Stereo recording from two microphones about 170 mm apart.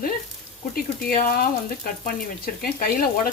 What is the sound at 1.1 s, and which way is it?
Speech, 55° left (ahead or behind).